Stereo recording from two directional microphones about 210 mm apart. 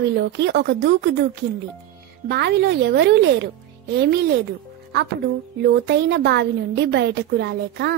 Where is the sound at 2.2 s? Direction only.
50° right (ahead or behind).